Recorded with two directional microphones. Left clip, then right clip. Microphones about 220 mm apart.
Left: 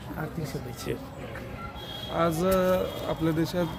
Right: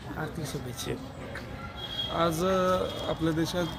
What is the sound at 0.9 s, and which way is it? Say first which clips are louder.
Speech: left 4 dB; centre (ahead or behind).